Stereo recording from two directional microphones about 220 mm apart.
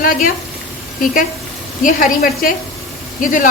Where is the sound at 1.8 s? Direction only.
40° left (ahead or behind).